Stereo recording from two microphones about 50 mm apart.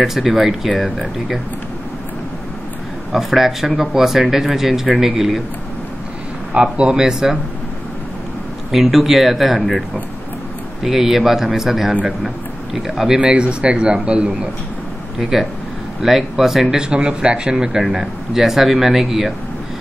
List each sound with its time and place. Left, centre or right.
0.0 s speech: centre
3.1 s speech: centre
6.5 s speech: right
8.7 s speech: centre
10.8 s speech: centre
13.1 s a man's voice: right
16.9 s speech: centre